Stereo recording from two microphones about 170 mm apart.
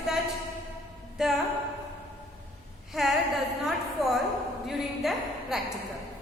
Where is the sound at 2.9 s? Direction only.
Centre (ahead or behind).